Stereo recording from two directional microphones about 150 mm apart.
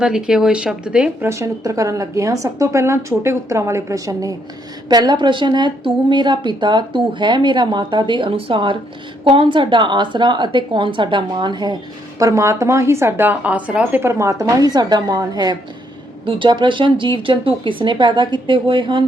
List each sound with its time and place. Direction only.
0.0 s speech: 5° right (ahead or behind)
1.3 s speech: 20° right (ahead or behind)